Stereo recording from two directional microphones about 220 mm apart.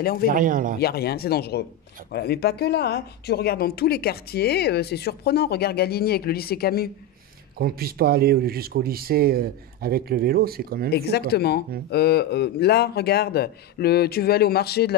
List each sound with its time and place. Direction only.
0.0 s a man's voice: 45° left (ahead or behind)
0.3 s speech: 40° right (ahead or behind)
0.7 s a man's voice: 45° left (ahead or behind)
7.5 s speech: 45° right (ahead or behind)
10.9 s a man's voice: 45° left (ahead or behind)